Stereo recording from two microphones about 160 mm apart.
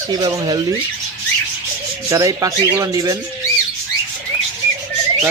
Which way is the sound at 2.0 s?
20° right (ahead or behind).